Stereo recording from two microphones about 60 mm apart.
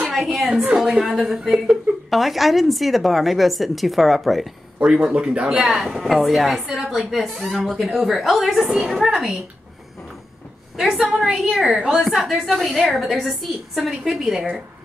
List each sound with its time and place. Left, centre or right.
0.1 s a woman's voice: centre
4.7 s speech: centre
5.9 s a woman's voice: centre
10.8 s a woman's voice: centre